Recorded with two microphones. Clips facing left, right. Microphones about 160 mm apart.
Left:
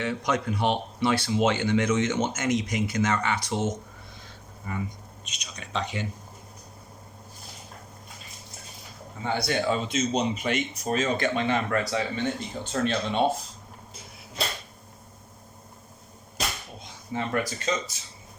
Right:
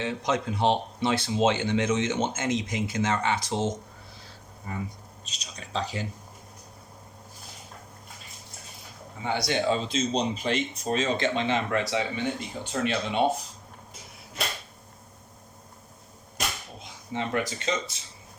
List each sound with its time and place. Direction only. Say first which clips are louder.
0.0 s speech: left 1 dB; 20° right (ahead or behind)
5.2 s speech: left 1 dB; 35° right (ahead or behind)
9.2 s speech: even; 15° right (ahead or behind)
17.1 s speech: left 1 dB; 20° right (ahead or behind)